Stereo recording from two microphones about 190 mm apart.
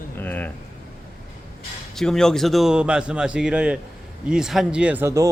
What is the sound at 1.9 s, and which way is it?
Speech, centre (ahead or behind).